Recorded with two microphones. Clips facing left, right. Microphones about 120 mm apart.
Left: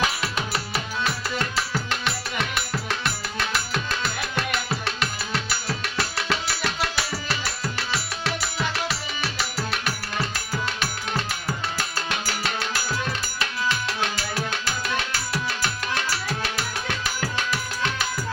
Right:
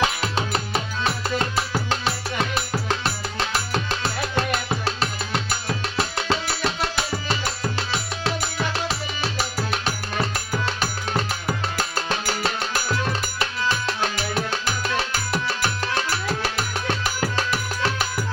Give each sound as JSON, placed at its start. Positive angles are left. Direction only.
{"t": 0.0, "sound": "music", "side_deg": -30}
{"t": 11.1, "sound": "music", "side_deg": -25}